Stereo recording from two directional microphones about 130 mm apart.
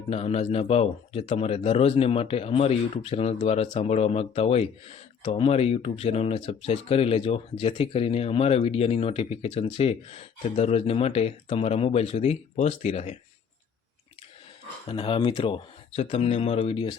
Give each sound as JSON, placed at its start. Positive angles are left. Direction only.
{"t": 0.1, "sound": "speech", "side_deg": 50}
{"t": 14.8, "sound": "speech", "side_deg": 45}